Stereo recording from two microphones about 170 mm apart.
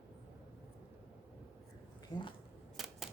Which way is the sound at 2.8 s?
Centre (ahead or behind).